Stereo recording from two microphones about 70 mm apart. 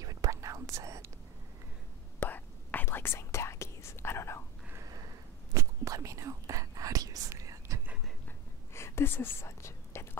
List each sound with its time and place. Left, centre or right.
0.0 s whispering: right
2.1 s whispering: left
5.5 s whispering: right
8.7 s whispering: left